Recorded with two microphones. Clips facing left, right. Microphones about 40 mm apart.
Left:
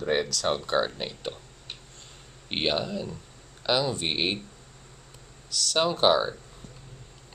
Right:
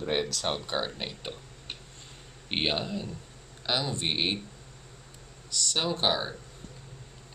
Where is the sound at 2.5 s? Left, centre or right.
Centre.